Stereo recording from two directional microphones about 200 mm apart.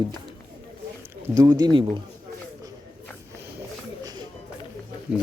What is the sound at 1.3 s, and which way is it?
Speech, 20° right (ahead or behind).